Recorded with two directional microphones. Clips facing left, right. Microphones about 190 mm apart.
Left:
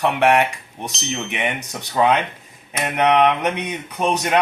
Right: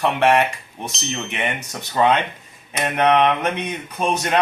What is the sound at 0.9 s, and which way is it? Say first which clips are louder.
Speech: left 2 dB; centre (ahead or behind).